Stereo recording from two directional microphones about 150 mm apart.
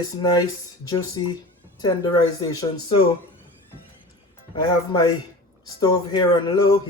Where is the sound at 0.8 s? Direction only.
25° left (ahead or behind).